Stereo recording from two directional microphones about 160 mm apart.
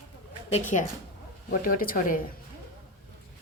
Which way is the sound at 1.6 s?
65° left (ahead or behind).